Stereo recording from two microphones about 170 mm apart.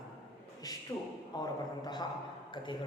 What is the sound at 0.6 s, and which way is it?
A woman's voice, 20° left (ahead or behind).